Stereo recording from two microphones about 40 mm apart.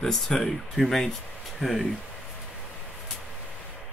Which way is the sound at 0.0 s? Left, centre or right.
Centre.